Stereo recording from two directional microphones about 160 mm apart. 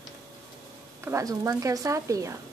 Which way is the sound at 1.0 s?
20° right (ahead or behind).